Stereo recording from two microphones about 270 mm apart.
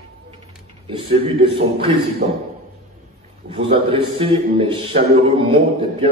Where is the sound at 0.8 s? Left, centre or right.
Centre.